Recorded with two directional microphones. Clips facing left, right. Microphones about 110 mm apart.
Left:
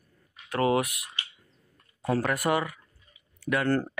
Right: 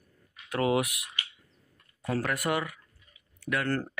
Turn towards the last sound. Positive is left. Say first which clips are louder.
# left 4 dB
turn(degrees=15)  # may be behind; listen again after turning